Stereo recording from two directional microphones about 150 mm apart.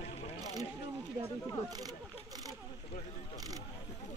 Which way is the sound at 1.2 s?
25° right (ahead or behind).